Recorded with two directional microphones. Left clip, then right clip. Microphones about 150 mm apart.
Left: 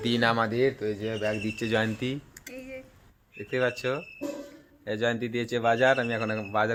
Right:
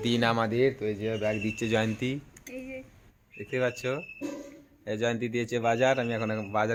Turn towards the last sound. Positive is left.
turn(degrees=5)  # may be behind; listen again after turning